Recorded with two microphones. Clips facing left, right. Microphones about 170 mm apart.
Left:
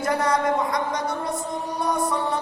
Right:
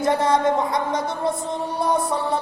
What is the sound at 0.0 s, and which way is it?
Music, 25° right (ahead or behind).